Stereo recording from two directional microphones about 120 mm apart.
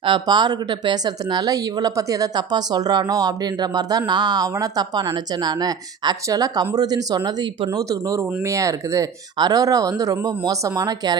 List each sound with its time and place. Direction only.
0.0 s speech: 40° right (ahead or behind)